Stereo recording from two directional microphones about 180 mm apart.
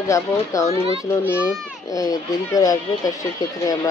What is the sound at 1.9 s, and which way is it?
Speech, 20° left (ahead or behind).